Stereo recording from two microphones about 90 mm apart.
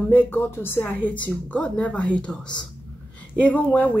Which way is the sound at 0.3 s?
25° left (ahead or behind).